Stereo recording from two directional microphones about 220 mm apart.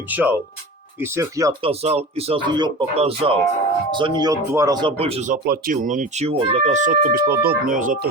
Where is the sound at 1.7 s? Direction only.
30° right (ahead or behind).